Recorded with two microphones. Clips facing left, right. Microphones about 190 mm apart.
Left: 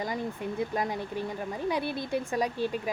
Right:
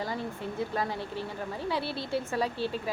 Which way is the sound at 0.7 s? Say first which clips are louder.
Left 1 dB; 15° left (ahead or behind).